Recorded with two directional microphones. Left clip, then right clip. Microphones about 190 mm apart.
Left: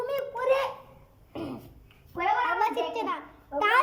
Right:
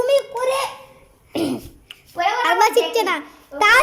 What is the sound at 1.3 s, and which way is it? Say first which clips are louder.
Cough: right 14 dB; 40° right (ahead or behind).